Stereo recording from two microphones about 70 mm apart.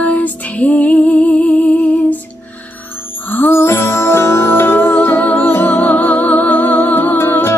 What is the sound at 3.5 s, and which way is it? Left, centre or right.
Music, left.